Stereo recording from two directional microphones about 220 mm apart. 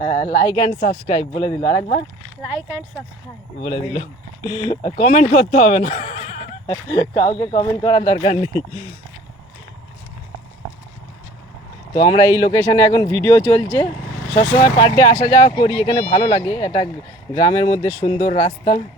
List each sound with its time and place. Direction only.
0.0 s a woman's voice: 35° left (ahead or behind)
2.4 s speech: 5° right (ahead or behind)
3.6 s a woman's voice: 35° left (ahead or behind)
4.4 s speech: 20° left (ahead or behind)
6.8 s speech: 15° left (ahead or behind)
12.0 s speech: 20° left (ahead or behind)
16.0 s a woman's voice: 30° left (ahead or behind)
16.2 s speech: 20° left (ahead or behind)
17.8 s speech: 25° left (ahead or behind)